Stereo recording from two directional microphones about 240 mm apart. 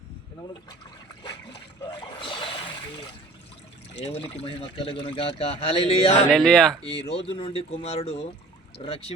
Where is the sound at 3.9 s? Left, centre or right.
Left.